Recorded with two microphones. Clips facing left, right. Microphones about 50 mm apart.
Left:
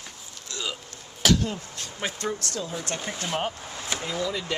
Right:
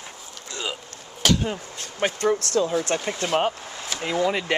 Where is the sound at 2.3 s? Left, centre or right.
Right.